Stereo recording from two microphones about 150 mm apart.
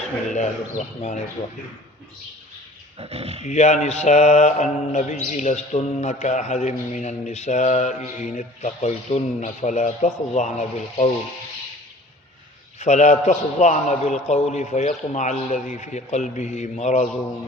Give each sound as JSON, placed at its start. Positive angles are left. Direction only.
{"t": 0.3, "sound": "mantra", "side_deg": 50}
{"t": 3.0, "sound": "speech", "side_deg": -40}
{"t": 3.4, "sound": "mantra", "side_deg": 50}
{"t": 12.8, "sound": "mantra", "side_deg": 50}